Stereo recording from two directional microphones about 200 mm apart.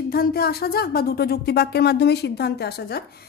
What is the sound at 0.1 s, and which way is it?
A woman's voice, 50° left (ahead or behind).